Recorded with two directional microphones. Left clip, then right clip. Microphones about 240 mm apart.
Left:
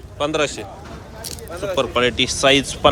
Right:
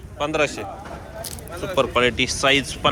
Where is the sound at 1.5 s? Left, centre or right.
Left.